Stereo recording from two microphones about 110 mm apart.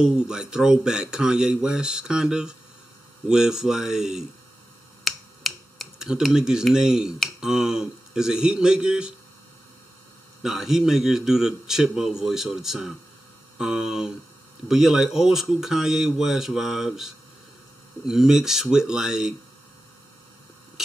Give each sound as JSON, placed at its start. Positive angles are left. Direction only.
{"t": 0.3, "sound": "a man's voice", "side_deg": -5}
{"t": 10.4, "sound": "a man's voice", "side_deg": -5}